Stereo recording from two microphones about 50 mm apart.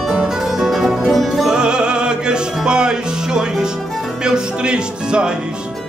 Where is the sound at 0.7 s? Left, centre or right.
Centre.